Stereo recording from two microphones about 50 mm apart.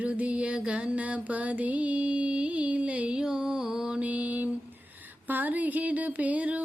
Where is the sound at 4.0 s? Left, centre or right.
Right.